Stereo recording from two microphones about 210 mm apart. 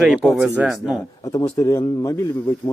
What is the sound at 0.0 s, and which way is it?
Speech, 5° right (ahead or behind).